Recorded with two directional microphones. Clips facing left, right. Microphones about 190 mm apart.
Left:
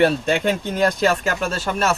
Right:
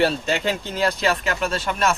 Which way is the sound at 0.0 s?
55° left (ahead or behind).